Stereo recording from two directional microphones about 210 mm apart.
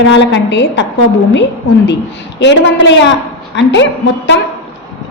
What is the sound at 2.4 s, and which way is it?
A woman's voice, 60° left (ahead or behind).